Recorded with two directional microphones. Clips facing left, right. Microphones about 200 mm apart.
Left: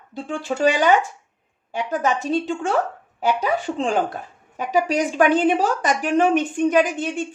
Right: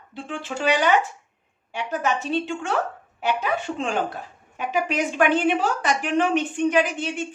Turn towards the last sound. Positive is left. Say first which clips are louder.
# left 3 dB
turn(degrees=45)  # may be behind; listen again after turning